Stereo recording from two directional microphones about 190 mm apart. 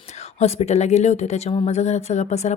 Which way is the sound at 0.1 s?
35° left (ahead or behind).